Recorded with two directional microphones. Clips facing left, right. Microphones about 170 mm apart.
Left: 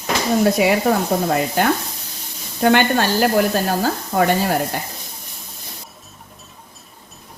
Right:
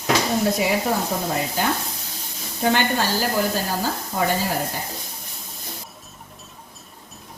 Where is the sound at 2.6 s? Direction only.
65° left (ahead or behind).